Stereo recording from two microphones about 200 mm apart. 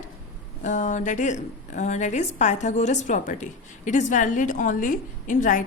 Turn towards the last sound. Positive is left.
turn(degrees=40)  # may be behind; listen again after turning